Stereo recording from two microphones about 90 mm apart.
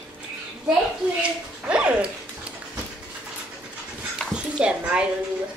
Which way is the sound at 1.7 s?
10° right (ahead or behind).